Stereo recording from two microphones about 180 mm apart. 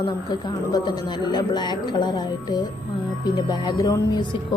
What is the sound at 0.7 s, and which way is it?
Speech, 25° left (ahead or behind).